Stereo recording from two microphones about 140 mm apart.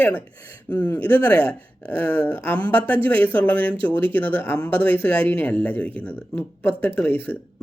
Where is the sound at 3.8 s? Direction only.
40° right (ahead or behind).